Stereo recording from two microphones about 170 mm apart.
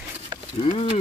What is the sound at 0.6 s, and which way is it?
Speech, 35° left (ahead or behind).